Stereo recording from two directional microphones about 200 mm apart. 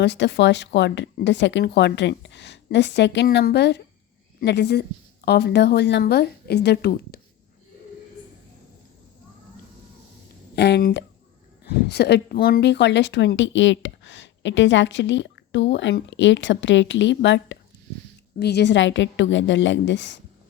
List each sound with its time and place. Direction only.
0.0 s speech: 60° left (ahead or behind)
10.5 s speech: 55° left (ahead or behind)